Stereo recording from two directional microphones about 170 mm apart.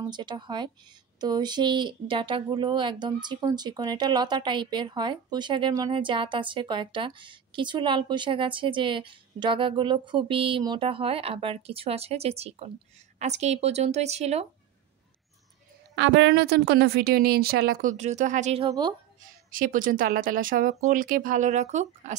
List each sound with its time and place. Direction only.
0.0 s a woman's voice: 25° right (ahead or behind)
15.9 s a woman's voice: 90° right; by 17.9 s 65° right (ahead or behind)
17.9 s speech: 45° right (ahead or behind)
18.7 s speech: 25° right (ahead or behind)
19.5 s speech: 55° right (ahead or behind)